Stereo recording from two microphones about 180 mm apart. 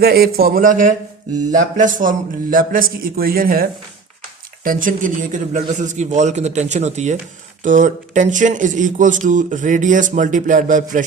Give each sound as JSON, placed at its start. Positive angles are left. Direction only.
{"t": 0.0, "sound": "a man's voice", "side_deg": -60}